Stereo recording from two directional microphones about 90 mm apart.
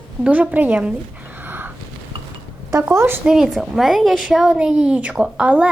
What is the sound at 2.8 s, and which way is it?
Speech, 25° right (ahead or behind).